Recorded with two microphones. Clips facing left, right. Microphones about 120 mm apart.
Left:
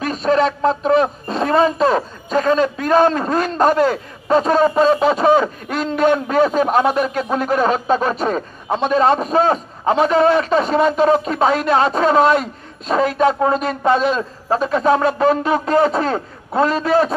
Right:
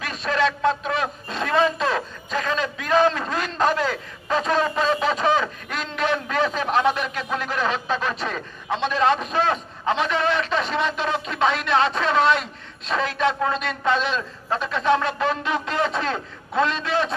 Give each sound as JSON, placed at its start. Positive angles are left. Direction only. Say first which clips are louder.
{"t": 0.0, "sound": "speech", "louder": "left 7 dB", "side_deg": 35}